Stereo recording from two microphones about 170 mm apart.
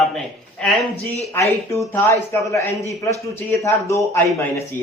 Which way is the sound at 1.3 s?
15° left (ahead or behind).